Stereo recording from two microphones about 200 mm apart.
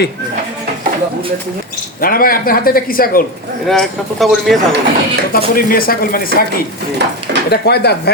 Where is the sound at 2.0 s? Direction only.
45° left (ahead or behind).